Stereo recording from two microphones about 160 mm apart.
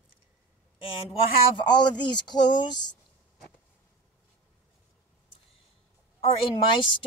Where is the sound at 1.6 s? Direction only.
30° left (ahead or behind).